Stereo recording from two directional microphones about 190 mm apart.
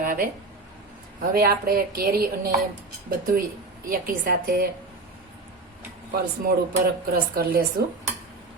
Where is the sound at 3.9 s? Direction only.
50° right (ahead or behind).